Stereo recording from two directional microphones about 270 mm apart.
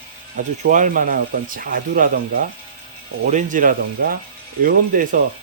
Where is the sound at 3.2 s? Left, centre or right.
Right.